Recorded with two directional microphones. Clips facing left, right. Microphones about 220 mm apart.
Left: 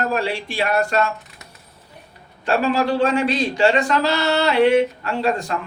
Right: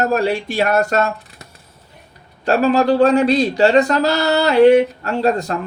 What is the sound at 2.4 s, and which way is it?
Speech, 40° right (ahead or behind).